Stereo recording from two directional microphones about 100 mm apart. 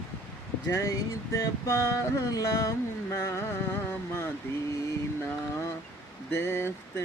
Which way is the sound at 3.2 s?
25° left (ahead or behind).